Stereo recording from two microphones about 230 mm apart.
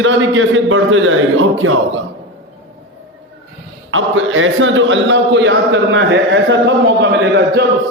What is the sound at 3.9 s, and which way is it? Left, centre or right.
A man's voice, right.